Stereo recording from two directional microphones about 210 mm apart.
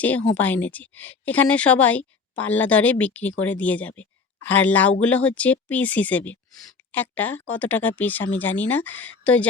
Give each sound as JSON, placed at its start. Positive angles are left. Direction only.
{"t": 0.0, "sound": "speech", "side_deg": 5}